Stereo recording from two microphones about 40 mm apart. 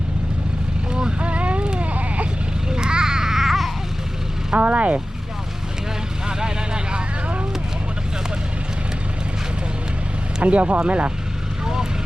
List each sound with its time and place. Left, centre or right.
0.9 s a sound: right
2.6 s babbling: centre
4.5 s speech: right
6.2 s vehicle: right
10.4 s speech: right
11.6 s vehicle: centre